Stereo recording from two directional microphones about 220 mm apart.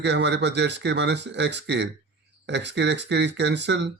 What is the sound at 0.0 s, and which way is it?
Speech, 50° right (ahead or behind).